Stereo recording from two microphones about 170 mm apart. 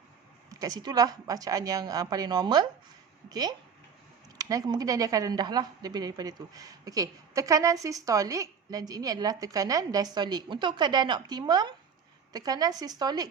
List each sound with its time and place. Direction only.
0.6 s a woman's voice: 25° right (ahead or behind)